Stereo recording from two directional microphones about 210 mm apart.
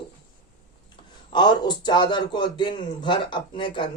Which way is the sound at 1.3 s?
20° left (ahead or behind).